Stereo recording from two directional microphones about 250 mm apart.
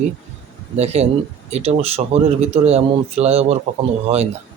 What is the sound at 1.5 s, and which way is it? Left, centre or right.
Speech, right.